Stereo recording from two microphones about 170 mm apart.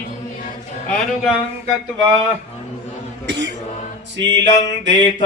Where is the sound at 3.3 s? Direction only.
90° right.